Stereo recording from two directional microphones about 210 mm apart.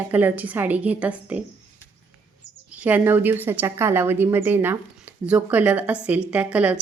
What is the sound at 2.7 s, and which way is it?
A woman's voice, 5° right (ahead or behind).